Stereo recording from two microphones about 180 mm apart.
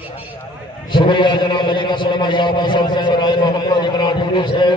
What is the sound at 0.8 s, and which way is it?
A man's voice, 25° left (ahead or behind).